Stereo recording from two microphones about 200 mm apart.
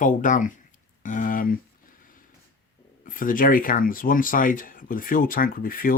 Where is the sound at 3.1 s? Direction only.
45° left (ahead or behind).